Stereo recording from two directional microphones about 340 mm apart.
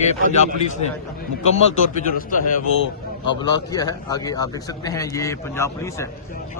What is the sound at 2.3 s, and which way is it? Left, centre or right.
Speech, left.